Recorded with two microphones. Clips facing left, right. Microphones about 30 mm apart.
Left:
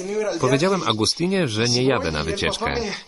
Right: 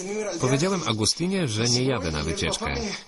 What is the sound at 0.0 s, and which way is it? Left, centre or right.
Speech, left.